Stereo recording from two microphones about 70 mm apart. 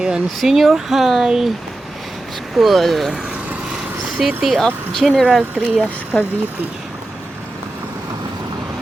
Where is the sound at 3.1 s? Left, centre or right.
Centre.